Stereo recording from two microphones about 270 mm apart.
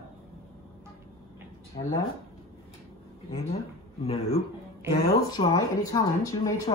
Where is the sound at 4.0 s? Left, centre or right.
Left.